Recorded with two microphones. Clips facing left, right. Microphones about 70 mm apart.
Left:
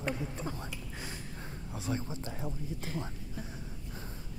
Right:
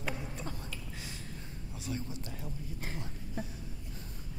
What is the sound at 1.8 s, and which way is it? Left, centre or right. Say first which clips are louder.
Speech: left 3 dB; left.